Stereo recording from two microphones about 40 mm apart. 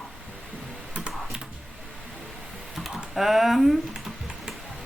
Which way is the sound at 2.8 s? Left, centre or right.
Centre.